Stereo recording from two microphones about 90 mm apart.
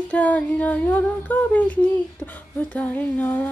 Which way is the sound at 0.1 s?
15° left (ahead or behind).